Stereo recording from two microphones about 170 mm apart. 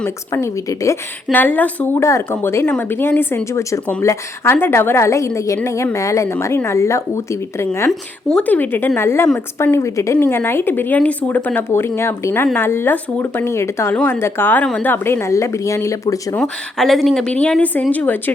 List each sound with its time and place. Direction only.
0.0 s a woman's voice: 15° left (ahead or behind)
7.9 s a woman's voice: 5° left (ahead or behind)
16.4 s a woman's voice: centre (ahead or behind)